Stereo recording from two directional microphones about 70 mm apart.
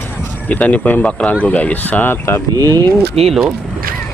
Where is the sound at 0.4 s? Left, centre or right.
Left.